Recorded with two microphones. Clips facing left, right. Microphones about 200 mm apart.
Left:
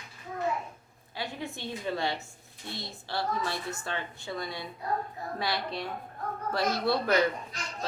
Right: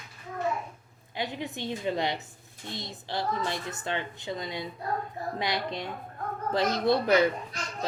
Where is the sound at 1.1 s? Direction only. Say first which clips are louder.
Right 3 dB; 20° right (ahead or behind).